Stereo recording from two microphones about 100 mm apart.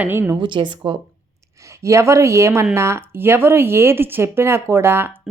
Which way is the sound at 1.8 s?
30° right (ahead or behind).